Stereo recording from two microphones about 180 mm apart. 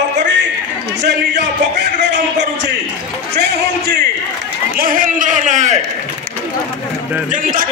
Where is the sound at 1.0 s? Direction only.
70° right (ahead or behind).